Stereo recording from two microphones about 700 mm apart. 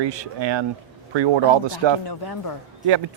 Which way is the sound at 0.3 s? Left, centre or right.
Right.